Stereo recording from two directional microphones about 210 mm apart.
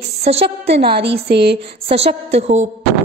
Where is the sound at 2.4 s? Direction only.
35° right (ahead or behind).